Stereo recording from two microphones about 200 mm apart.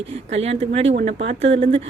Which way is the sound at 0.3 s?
30° right (ahead or behind).